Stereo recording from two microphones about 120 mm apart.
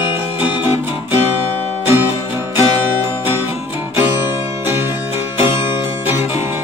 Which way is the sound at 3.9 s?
20° right (ahead or behind).